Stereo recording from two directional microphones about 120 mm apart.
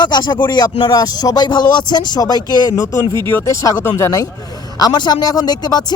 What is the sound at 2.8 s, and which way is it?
Speech, 20° left (ahead or behind).